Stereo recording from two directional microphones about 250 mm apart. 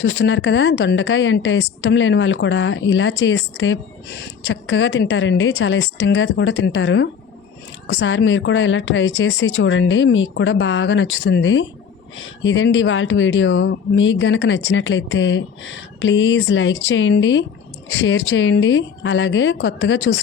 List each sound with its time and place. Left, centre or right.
0.0 s speech: left